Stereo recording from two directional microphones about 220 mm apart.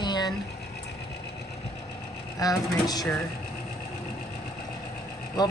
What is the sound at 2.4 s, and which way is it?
Speech, 15° left (ahead or behind).